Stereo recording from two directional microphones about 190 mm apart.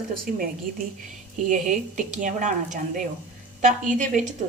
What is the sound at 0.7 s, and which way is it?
A woman's voice, 50° right (ahead or behind).